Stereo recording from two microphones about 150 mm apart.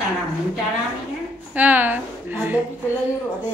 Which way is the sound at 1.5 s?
10° right (ahead or behind).